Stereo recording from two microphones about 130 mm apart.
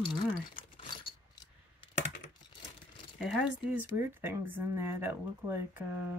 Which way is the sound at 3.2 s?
5° right (ahead or behind).